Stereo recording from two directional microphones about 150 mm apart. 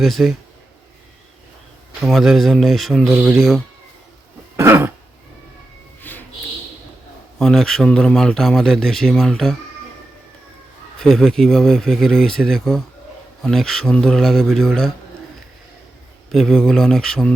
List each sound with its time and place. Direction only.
0.0 s speech: centre (ahead or behind)
2.0 s speech: centre (ahead or behind)
4.5 s cough: 15° right (ahead or behind)
6.0 s music: 10° left (ahead or behind)
7.3 s speech: 5° left (ahead or behind)
11.0 s speech: centre (ahead or behind)
16.3 s speech: centre (ahead or behind)